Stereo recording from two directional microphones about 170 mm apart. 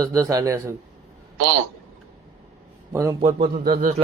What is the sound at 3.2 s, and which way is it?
Speech, 35° right (ahead or behind).